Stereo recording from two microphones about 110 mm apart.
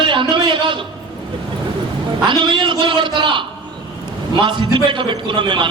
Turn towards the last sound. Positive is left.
turn(degrees=-50)  # may be behind; listen again after turning